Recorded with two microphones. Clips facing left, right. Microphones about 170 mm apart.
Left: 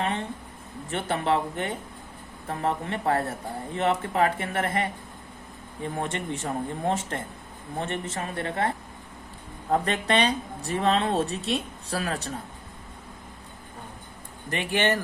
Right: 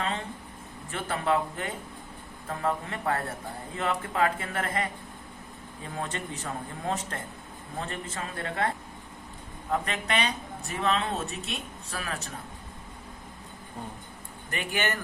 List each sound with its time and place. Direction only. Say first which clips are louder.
0.9 s speech: left 2 dB; 30° left (ahead or behind)
6.0 s speech: left 3 dB; 25° left (ahead or behind)
9.7 s speech: left 5 dB; 35° left (ahead or behind)
14.5 s speech: left 6 dB; 35° left (ahead or behind)